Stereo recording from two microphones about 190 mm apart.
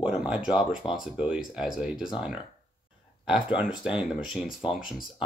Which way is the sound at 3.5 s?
5° right (ahead or behind).